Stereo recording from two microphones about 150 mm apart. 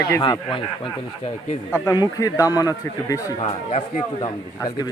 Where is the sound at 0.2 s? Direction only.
35° left (ahead or behind).